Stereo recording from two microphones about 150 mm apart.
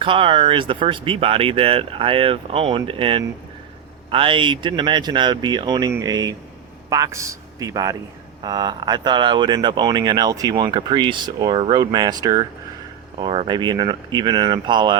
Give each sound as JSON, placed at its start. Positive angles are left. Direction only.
{"t": 0.0, "sound": "speech", "side_deg": -35}